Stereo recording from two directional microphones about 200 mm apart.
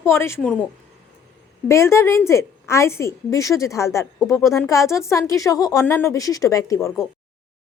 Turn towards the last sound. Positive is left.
turn(degrees=15)  # may be behind; listen again after turning